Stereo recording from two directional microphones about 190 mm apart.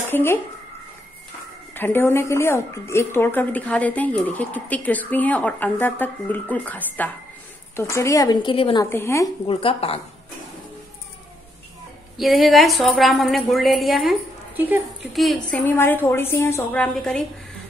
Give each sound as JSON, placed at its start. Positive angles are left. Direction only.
{"t": 0.1, "sound": "speech", "side_deg": 10}
{"t": 1.7, "sound": "a woman's voice", "side_deg": 10}
{"t": 8.8, "sound": "speech", "side_deg": 15}
{"t": 9.5, "sound": "a woman's voice", "side_deg": 30}
{"t": 12.2, "sound": "a woman's voice", "side_deg": 0}
{"t": 15.1, "sound": "speech", "side_deg": 0}